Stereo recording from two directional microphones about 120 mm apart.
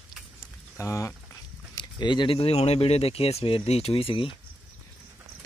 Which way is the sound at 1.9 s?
40° left (ahead or behind).